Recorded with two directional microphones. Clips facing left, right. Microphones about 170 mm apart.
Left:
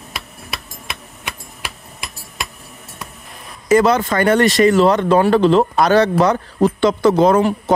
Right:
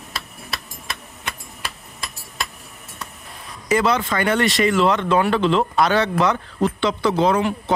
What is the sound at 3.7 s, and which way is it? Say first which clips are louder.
Speech: left 6 dB; 45° left (ahead or behind).